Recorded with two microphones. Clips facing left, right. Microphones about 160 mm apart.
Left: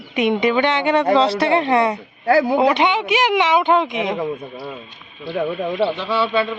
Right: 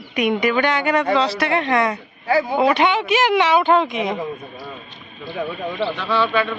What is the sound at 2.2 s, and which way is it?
Speech, 70° left (ahead or behind).